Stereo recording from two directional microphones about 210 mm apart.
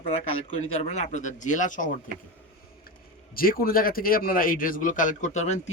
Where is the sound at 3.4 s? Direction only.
45° left (ahead or behind).